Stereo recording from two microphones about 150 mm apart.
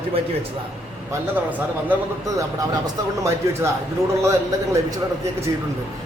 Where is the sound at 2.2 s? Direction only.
20° right (ahead or behind).